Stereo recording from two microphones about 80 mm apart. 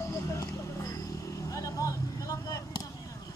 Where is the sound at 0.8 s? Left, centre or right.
Left.